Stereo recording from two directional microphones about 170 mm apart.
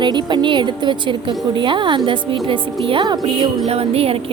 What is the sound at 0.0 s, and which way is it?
A woman's voice, 25° right (ahead or behind).